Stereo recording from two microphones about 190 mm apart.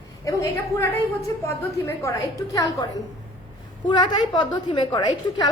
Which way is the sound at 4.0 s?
25° left (ahead or behind).